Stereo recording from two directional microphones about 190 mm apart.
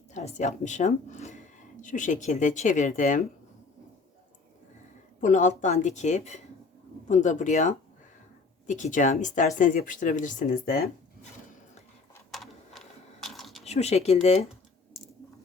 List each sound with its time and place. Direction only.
0.1 s a woman's voice: 40° left (ahead or behind)
5.2 s a woman's voice: 40° left (ahead or behind)
12.3 s typing: centre (ahead or behind)
13.7 s a woman's voice: 35° left (ahead or behind)